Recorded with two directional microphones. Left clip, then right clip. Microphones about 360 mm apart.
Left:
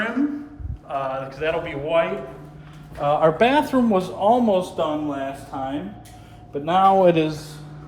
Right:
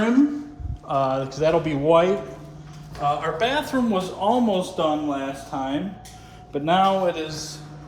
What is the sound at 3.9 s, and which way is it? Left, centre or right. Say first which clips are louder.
Speech: left 4 dB; centre.